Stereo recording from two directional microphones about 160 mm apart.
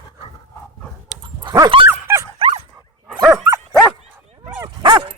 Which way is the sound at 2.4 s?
40° right (ahead or behind).